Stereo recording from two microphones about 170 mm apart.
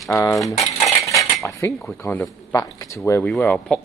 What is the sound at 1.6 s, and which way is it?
Speech, 15° left (ahead or behind).